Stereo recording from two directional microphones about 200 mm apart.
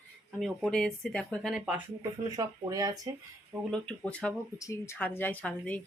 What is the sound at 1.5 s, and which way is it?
Speech, 5° right (ahead or behind).